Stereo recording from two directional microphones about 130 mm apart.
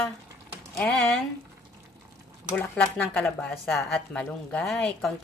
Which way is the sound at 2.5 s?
10° left (ahead or behind).